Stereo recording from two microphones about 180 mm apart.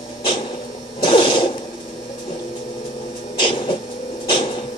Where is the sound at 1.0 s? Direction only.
30° left (ahead or behind).